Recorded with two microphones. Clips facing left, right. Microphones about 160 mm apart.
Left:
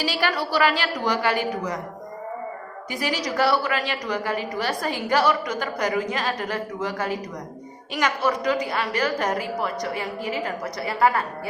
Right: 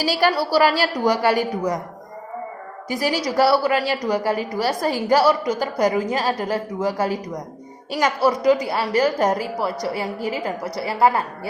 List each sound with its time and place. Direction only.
0.0 s a woman's voice: 40° right (ahead or behind)
2.9 s a woman's voice: 40° right (ahead or behind)